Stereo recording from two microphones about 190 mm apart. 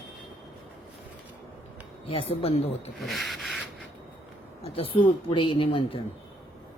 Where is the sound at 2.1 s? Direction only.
30° left (ahead or behind).